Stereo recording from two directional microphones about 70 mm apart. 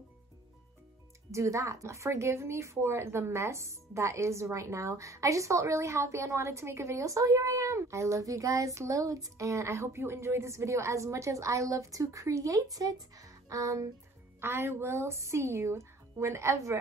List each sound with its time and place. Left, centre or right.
1.3 s speech: right
14.4 s a woman's voice: right